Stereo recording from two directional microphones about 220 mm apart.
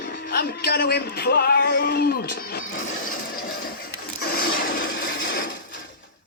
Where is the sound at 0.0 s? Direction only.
45° left (ahead or behind).